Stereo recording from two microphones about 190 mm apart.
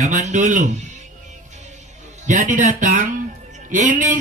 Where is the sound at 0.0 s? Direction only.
40° right (ahead or behind).